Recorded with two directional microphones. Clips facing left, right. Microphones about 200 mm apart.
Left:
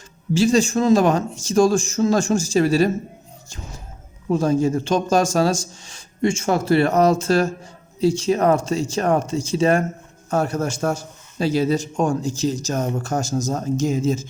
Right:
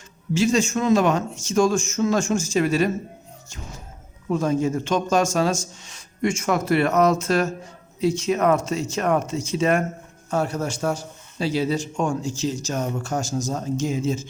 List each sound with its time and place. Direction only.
0.3 s speech: 35° left (ahead or behind)
4.3 s speech: 35° left (ahead or behind)
10.2 s a man's voice: 45° left (ahead or behind)